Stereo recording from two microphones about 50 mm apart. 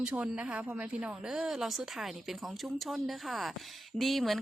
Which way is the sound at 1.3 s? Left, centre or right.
Centre.